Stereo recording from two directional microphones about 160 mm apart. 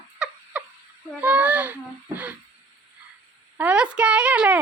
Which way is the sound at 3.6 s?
5° right (ahead or behind).